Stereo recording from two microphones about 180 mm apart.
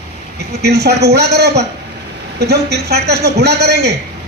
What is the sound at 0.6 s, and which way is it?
A woman's voice, 65° right (ahead or behind).